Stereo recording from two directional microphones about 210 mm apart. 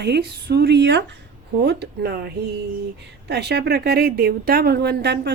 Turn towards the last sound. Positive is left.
turn(degrees=-50)  # may be behind; listen again after turning